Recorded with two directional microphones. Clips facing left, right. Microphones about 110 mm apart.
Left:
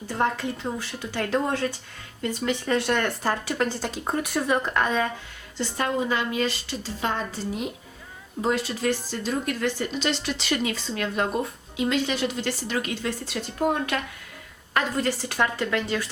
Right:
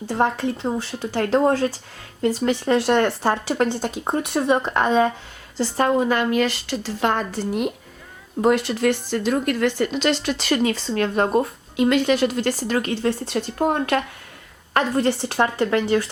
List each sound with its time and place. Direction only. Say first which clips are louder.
0.1 s speech: right 4 dB; 30° right (ahead or behind)
3.9 s speech: right 4 dB; 20° right (ahead or behind); by 5.9 s 40° right (ahead or behind)
6.0 s a woman's voice: right 6 dB; 60° right (ahead or behind); by 16.0 s 30° right (ahead or behind)